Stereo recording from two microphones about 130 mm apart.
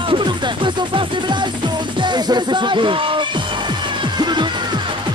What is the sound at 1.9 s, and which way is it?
Speech, 35° right (ahead or behind).